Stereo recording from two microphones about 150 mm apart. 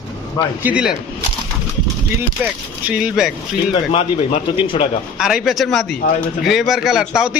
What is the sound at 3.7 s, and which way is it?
Speech, 40° left (ahead or behind).